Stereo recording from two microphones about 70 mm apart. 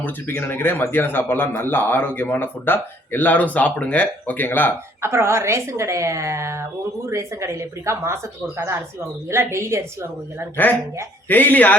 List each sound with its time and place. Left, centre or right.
0.0 s a man's voice: left
4.9 s a woman's voice: right
10.6 s a man's voice: left